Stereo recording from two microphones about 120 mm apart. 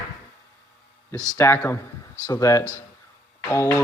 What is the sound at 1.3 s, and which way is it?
Speech, 20° left (ahead or behind).